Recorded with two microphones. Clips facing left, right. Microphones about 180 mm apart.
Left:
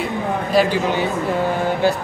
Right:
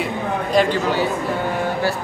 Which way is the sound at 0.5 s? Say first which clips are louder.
Even; 5° left (ahead or behind).